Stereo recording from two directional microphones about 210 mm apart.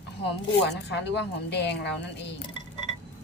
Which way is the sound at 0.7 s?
55° left (ahead or behind).